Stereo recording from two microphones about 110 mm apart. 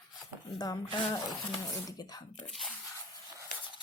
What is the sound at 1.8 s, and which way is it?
Speech, 40° left (ahead or behind).